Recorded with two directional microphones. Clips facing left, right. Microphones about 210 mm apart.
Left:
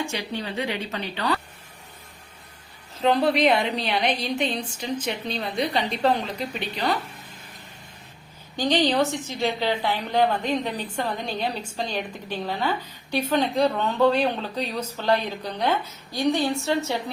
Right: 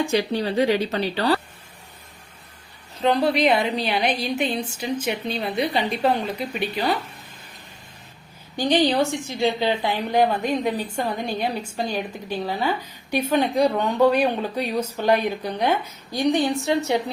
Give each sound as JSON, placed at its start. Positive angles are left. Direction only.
{"t": 0.0, "sound": "speech", "side_deg": -35}
{"t": 3.0, "sound": "a woman's voice", "side_deg": 0}
{"t": 8.5, "sound": "a woman's voice", "side_deg": -10}